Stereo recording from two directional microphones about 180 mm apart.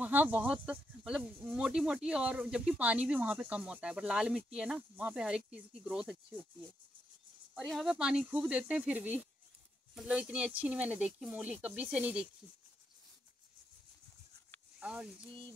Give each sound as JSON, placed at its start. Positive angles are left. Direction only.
{"t": 0.0, "sound": "speech", "side_deg": -10}
{"t": 7.5, "sound": "speech", "side_deg": 0}
{"t": 14.8, "sound": "speech", "side_deg": -5}